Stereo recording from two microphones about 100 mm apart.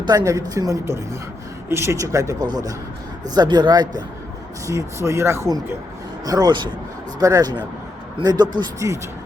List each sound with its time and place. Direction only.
0.3 s speech: 35° right (ahead or behind)
4.6 s speech: 30° right (ahead or behind)
6.2 s speech: 40° right (ahead or behind)